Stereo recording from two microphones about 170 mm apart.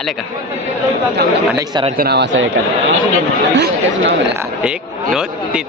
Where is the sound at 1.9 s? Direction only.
75° right (ahead or behind); by 2.4 s 90° right.